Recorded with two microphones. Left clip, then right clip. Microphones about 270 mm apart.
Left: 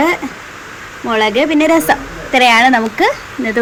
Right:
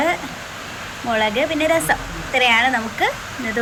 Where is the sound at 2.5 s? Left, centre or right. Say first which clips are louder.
Left 7 dB; left.